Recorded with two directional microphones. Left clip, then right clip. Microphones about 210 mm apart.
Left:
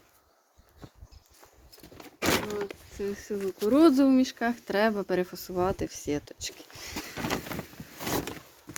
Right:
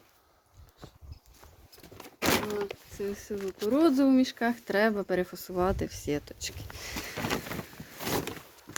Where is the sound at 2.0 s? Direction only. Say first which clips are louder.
Even; 20° right (ahead or behind).